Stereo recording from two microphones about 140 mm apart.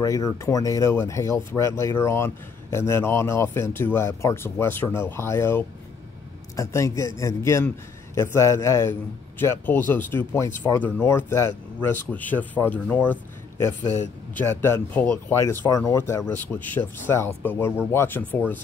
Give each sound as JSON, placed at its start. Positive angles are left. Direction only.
{"t": 0.0, "sound": "speech", "side_deg": 25}